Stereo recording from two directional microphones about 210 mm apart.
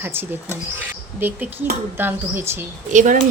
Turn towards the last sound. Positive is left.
turn(degrees=-35)  # may be behind; listen again after turning